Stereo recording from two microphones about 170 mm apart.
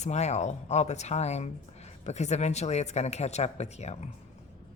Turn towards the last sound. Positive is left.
turn(degrees=40)  # may be behind; listen again after turning